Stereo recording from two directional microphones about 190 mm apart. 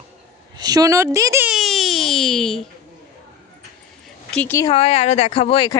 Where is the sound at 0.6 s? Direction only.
20° right (ahead or behind).